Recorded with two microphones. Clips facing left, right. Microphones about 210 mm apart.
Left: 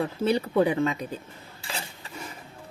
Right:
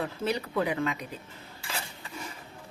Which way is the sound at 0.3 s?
30° left (ahead or behind).